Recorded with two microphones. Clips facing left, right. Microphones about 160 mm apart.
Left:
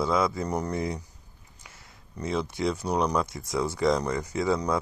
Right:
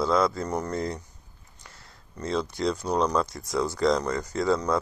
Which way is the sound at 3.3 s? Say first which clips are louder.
Right 1 dB; 25° left (ahead or behind).